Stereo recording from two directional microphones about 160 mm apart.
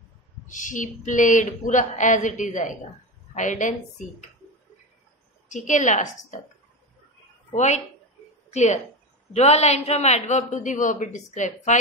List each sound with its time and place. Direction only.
0.5 s a man's voice: 55° left (ahead or behind)
5.5 s a man's voice: 50° left (ahead or behind)
7.5 s a man's voice: 45° left (ahead or behind)